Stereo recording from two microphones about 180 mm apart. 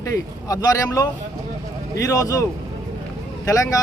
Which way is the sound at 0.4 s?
20° left (ahead or behind).